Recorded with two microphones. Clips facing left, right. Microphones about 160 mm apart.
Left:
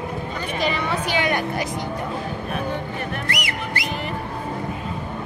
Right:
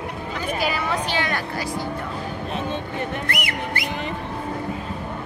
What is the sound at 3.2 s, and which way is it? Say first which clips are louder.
Speech: right 1 dB; 55° right (ahead or behind).